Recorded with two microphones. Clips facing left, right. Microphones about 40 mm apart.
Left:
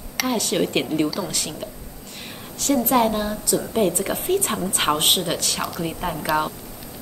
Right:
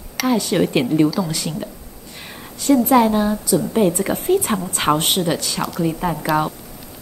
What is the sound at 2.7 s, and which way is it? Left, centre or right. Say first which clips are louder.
Speech: right 6 dB; right.